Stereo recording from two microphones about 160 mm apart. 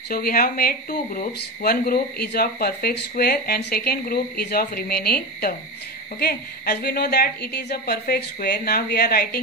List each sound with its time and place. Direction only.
0.1 s speech: 65° left (ahead or behind)